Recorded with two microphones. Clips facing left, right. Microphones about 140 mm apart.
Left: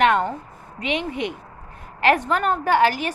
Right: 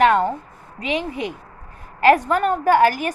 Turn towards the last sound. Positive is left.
turn(degrees=-45)  # may be behind; listen again after turning